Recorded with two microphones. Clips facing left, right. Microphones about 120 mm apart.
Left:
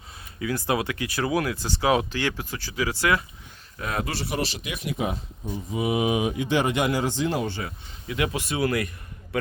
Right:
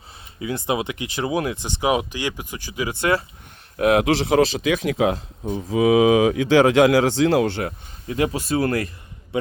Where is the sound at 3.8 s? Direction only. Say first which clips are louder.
Right 12 dB; 70° right (ahead or behind).